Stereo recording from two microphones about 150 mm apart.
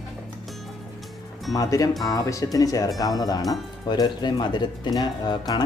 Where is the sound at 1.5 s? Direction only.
25° left (ahead or behind).